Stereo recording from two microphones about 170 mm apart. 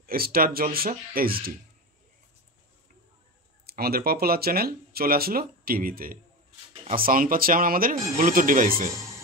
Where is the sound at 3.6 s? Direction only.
65° right (ahead or behind).